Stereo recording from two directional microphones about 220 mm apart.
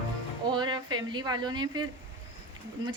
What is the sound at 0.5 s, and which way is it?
A woman's voice, 20° right (ahead or behind).